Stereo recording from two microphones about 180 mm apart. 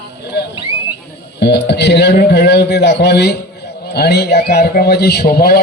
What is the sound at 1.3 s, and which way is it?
A man's voice, 65° left (ahead or behind).